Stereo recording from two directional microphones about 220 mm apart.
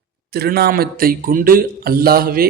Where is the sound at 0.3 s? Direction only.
45° right (ahead or behind).